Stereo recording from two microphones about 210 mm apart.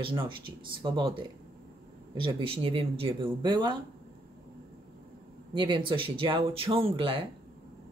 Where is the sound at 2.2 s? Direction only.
25° right (ahead or behind).